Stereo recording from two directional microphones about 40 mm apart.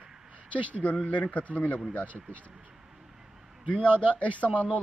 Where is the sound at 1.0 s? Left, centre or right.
Left.